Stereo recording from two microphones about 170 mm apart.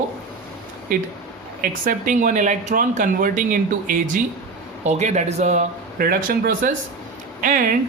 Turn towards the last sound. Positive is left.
turn(degrees=-50)  # may be behind; listen again after turning